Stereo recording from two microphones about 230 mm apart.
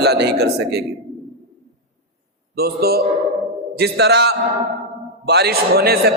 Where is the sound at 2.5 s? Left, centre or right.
Right.